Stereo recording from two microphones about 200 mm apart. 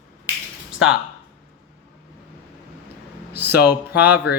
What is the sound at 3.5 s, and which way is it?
Speech, 55° left (ahead or behind).